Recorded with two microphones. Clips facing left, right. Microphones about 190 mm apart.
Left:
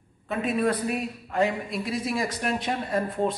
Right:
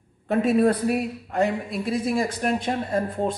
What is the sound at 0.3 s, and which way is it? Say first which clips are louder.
A man's voice: right 6 dB; 45° right (ahead or behind).